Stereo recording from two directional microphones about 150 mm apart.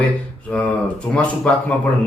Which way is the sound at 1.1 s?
5° left (ahead or behind).